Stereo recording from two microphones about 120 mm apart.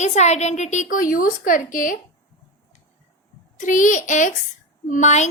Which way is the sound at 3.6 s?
90° left.